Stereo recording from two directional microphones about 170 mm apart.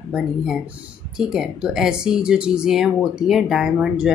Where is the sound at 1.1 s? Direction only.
5° right (ahead or behind).